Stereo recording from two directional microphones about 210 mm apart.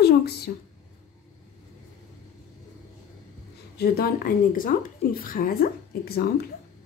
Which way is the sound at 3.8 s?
45° left (ahead or behind).